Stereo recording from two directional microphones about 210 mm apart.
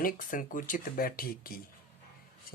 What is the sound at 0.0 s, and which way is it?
Speech, 40° left (ahead or behind).